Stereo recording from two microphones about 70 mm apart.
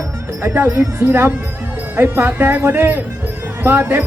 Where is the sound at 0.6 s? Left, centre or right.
Right.